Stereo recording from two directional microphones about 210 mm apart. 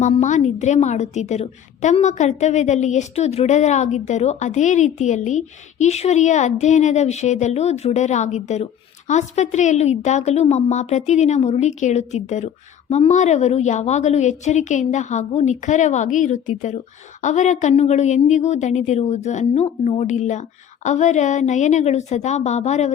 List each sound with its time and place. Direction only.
0.0 s a woman's voice: 35° left (ahead or behind)